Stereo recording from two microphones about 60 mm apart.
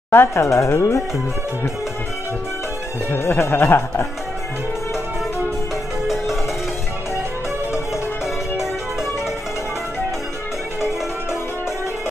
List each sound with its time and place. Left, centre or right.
0.1 s speech: left
3.1 s speech: left